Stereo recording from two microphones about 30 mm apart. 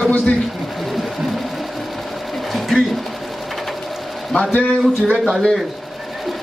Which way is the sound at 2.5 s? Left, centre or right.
Centre.